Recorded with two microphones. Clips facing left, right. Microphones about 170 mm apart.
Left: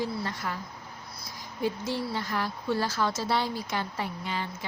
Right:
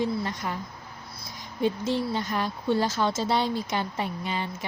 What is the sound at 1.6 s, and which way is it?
Speech, 25° right (ahead or behind).